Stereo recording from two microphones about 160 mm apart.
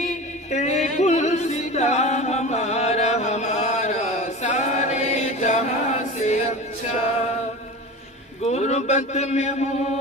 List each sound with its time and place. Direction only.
0.5 s music: 45° left (ahead or behind)
6.2 s chant: 45° left (ahead or behind)
8.5 s a man's voice: 45° left (ahead or behind)